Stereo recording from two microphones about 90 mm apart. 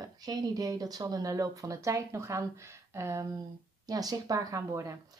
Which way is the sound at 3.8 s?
45° right (ahead or behind).